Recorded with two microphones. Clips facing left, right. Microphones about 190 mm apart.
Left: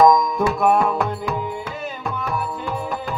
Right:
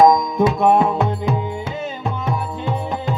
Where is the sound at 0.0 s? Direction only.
25° right (ahead or behind).